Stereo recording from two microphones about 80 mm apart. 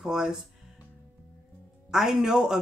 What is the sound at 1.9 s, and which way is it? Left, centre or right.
Speech, centre.